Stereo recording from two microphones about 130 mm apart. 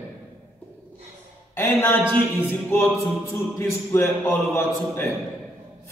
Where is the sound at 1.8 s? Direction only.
15° left (ahead or behind).